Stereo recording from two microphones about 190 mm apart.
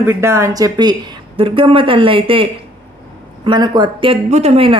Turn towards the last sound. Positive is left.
turn(degrees=-30)  # may be behind; listen again after turning